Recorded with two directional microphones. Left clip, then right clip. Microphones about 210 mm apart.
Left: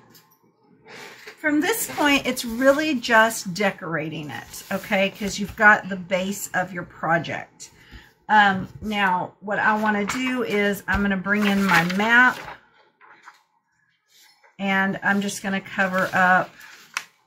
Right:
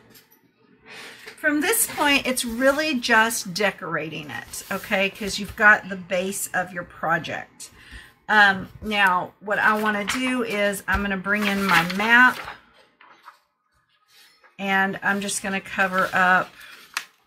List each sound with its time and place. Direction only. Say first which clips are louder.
1.4 s a woman's voice: even; 15° right (ahead or behind)
8.3 s a woman's voice: even; 20° right (ahead or behind)
14.6 s a woman's voice: right 1 dB; 10° right (ahead or behind)